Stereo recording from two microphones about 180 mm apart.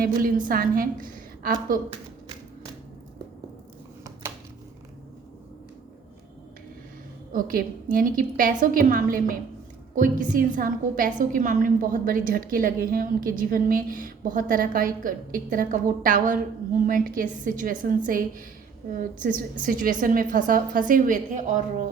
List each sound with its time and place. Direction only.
0.0 s a woman's voice: 50° right (ahead or behind)
7.3 s a woman's voice: 50° right (ahead or behind)